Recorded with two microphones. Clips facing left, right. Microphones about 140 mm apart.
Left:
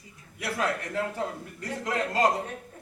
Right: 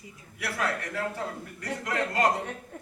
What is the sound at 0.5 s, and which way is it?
A man's voice, 20° left (ahead or behind).